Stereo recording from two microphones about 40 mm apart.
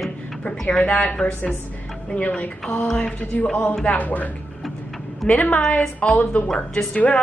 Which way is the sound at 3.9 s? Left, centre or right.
Left.